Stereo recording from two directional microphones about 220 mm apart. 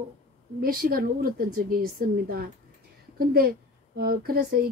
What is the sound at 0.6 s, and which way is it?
A woman's voice, 40° right (ahead or behind).